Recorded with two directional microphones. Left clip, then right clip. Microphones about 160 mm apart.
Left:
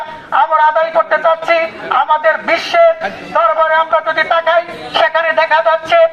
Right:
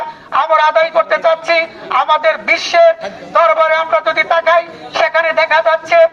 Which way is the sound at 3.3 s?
25° right (ahead or behind).